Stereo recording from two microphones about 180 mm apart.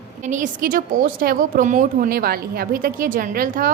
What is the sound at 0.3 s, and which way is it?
A woman's voice, 45° right (ahead or behind).